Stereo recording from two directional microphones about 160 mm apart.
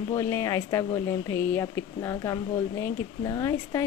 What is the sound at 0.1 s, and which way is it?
Speech, 20° left (ahead or behind).